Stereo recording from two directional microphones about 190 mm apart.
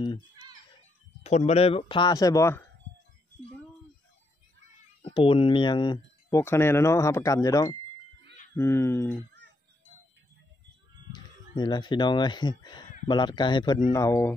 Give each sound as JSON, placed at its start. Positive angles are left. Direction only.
{"t": 1.2, "sound": "speech", "side_deg": 35}
{"t": 5.0, "sound": "speech", "side_deg": 30}
{"t": 11.1, "sound": "speech", "side_deg": 20}